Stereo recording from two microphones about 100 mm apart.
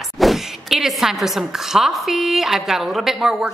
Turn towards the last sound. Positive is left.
turn(degrees=-5)  # may be behind; listen again after turning